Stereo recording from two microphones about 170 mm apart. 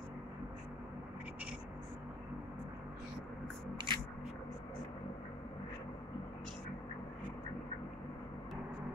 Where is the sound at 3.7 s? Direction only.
30° right (ahead or behind).